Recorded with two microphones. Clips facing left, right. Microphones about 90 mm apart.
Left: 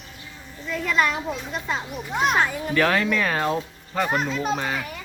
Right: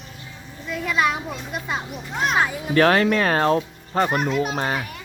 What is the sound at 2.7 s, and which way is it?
Speech, 45° right (ahead or behind).